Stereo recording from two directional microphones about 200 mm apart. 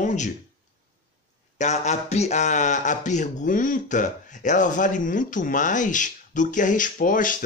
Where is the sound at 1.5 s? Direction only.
35° left (ahead or behind).